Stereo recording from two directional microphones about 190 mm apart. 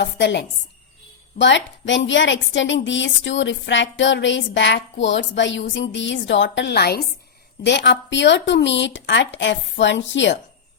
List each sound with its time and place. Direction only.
0.0 s a woman's voice: 65° left (ahead or behind)